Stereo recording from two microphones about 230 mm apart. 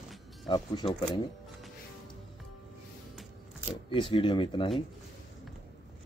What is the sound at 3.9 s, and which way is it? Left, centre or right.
Speech, left.